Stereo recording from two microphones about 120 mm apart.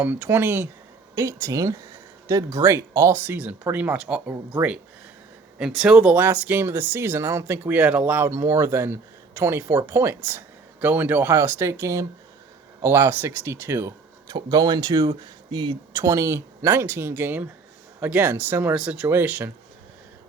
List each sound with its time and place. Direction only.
0.0 s speech: 15° right (ahead or behind)
5.5 s speech: 5° right (ahead or behind); by 13.9 s 20° right (ahead or behind)
14.3 s speech: 35° right (ahead or behind); by 19.5 s 15° right (ahead or behind)